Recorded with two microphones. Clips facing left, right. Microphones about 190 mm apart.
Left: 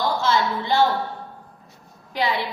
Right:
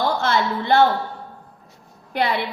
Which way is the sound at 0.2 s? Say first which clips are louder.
Right 1 dB; 60° right (ahead or behind).